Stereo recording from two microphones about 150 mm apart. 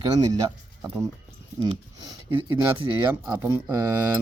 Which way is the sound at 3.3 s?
15° right (ahead or behind).